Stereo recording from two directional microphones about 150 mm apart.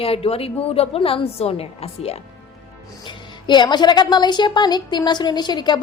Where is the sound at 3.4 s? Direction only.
30° left (ahead or behind).